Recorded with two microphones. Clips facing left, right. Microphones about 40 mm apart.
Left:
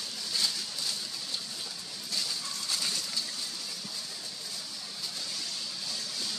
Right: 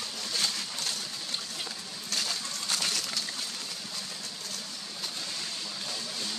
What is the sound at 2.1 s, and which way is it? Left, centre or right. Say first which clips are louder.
Coin: right 2 dB; right.